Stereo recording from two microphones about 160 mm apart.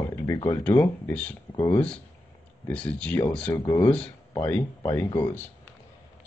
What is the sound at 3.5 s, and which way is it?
Speech, 20° left (ahead or behind).